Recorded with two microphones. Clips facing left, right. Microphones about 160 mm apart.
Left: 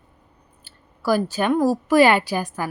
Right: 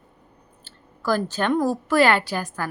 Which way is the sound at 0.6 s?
10° left (ahead or behind).